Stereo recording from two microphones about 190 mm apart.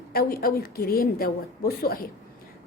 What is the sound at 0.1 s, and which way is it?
A woman's voice, 50° left (ahead or behind).